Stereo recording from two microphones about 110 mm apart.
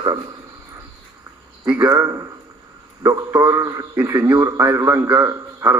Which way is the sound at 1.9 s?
30° right (ahead or behind).